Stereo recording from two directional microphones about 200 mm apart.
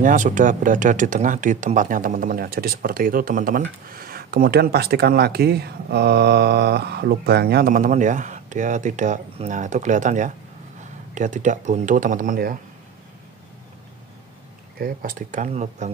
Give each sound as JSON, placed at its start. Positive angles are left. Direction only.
{"t": 0.0, "sound": "speech", "side_deg": -40}
{"t": 14.8, "sound": "speech", "side_deg": -45}